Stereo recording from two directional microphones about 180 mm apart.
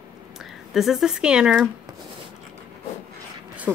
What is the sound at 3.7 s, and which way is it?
Speech, 15° right (ahead or behind).